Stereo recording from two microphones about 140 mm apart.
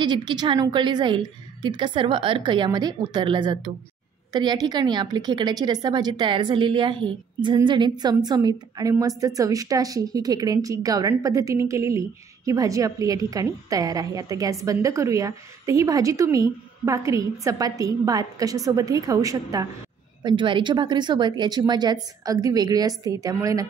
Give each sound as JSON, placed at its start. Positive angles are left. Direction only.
{"t": 0.0, "sound": "a woman's voice", "side_deg": -30}
{"t": 20.2, "sound": "a woman's voice", "side_deg": -35}